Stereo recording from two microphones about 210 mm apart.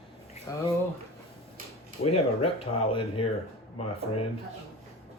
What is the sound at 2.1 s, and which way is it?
Speech, 30° left (ahead or behind).